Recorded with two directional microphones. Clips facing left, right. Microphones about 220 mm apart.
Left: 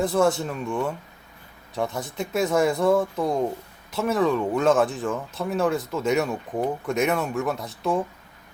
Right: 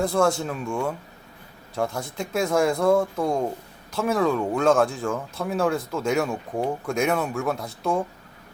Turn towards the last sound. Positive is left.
turn(degrees=0)  # may be behind; listen again after turning